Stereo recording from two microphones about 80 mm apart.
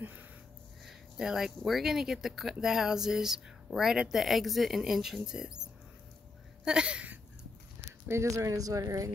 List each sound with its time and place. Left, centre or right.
0.8 s speech: centre
6.6 s a sound: centre
8.1 s speech: right